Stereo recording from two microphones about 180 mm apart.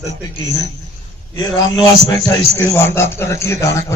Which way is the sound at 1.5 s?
20° left (ahead or behind).